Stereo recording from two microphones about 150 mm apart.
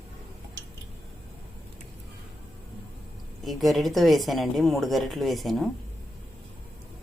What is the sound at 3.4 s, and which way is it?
Speech, centre (ahead or behind).